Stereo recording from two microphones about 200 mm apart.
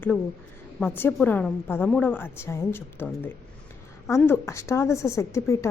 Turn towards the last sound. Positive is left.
turn(degrees=15)  # may be behind; listen again after turning